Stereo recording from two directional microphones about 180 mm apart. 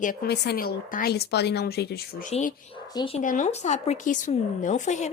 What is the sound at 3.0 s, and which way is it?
Speech, 30° left (ahead or behind).